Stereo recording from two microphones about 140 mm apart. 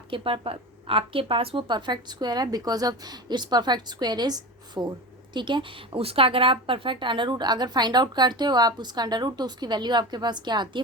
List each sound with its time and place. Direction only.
0.1 s a woman's voice: 40° right (ahead or behind)